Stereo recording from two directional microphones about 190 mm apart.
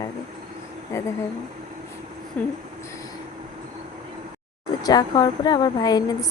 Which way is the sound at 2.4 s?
5° left (ahead or behind).